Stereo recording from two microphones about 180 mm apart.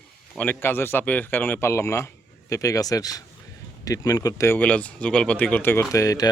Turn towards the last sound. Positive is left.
turn(degrees=20)  # may be behind; listen again after turning